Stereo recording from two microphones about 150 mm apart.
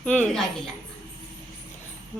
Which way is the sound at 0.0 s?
5° left (ahead or behind).